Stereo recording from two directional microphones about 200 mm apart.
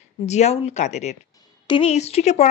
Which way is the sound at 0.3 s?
35° left (ahead or behind).